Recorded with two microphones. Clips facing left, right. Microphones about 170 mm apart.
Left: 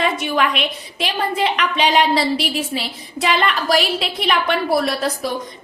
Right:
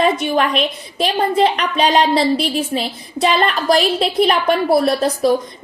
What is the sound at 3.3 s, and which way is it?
A woman's voice, 35° right (ahead or behind).